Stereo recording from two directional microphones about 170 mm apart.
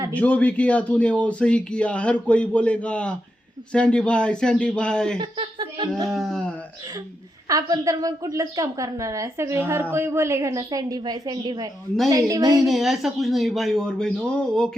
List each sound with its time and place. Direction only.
0.1 s speech: 10° left (ahead or behind)
5.1 s chuckle: 30° right (ahead or behind)
6.1 s speech: centre (ahead or behind)
7.4 s a woman's voice: 20° right (ahead or behind)
12.6 s speech: centre (ahead or behind)